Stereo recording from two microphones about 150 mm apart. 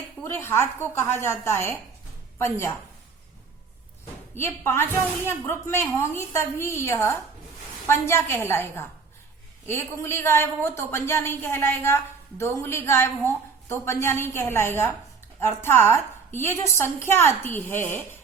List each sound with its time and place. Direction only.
0.3 s speech: 15° left (ahead or behind)
4.4 s speech: 15° left (ahead or behind)